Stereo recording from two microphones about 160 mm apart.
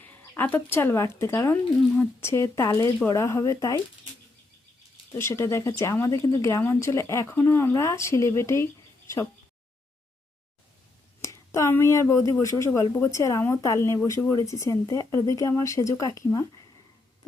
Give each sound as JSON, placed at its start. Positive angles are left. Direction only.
{"t": 0.0, "sound": "speech", "side_deg": 10}
{"t": 5.1, "sound": "speech", "side_deg": 15}
{"t": 11.2, "sound": "speech", "side_deg": 20}